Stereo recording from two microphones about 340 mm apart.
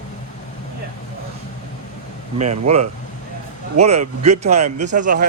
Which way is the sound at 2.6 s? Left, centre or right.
Centre.